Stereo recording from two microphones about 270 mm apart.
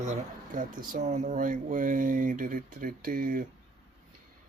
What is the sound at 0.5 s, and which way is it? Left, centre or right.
Speech, right.